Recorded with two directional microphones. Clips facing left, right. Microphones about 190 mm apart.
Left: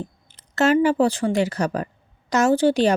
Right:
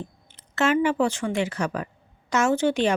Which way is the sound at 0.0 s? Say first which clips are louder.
Left 4 dB; 40° left (ahead or behind).